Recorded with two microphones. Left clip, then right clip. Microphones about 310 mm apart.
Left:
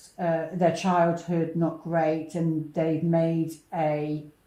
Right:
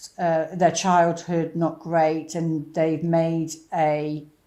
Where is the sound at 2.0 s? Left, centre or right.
Right.